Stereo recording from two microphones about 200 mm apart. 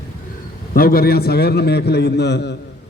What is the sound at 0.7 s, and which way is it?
A man's voice, 50° left (ahead or behind).